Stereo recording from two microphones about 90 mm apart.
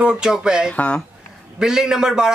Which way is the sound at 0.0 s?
10° right (ahead or behind).